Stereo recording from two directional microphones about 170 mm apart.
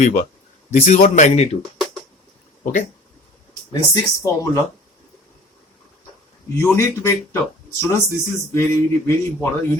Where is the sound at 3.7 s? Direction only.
20° left (ahead or behind).